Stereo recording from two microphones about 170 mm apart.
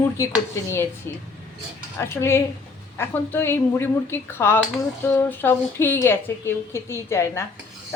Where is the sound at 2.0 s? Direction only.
15° left (ahead or behind).